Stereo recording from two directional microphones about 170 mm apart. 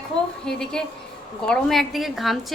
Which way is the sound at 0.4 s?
5° left (ahead or behind).